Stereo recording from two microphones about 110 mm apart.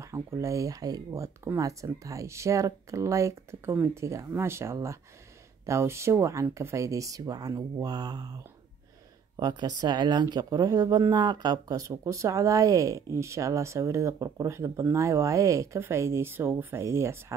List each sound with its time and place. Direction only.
0.0 s speech: 25° right (ahead or behind)
9.4 s speech: 40° right (ahead or behind)